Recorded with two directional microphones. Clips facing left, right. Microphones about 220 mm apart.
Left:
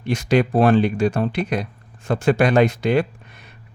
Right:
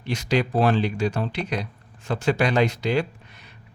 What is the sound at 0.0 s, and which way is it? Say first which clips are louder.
Speech: left 5 dB; 50° left (ahead or behind).